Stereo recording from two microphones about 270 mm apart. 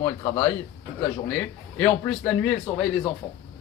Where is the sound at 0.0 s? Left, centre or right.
Centre.